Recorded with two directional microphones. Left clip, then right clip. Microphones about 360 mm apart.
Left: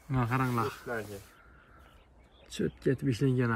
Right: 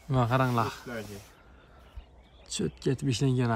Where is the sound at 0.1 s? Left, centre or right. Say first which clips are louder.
Right 5 dB; centre.